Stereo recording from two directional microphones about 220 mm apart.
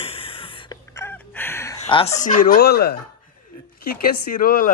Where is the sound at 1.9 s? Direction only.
25° left (ahead or behind).